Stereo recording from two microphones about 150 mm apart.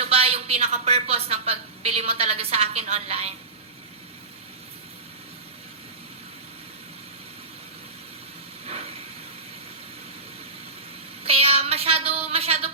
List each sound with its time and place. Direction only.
0.0 s a woman's voice: 40° right (ahead or behind)
8.6 s hiss: 45° right (ahead or behind)
11.2 s a sound: 40° right (ahead or behind)